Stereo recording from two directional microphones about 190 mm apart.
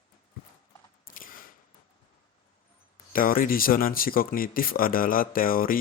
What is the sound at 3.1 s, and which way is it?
Speech, 50° left (ahead or behind).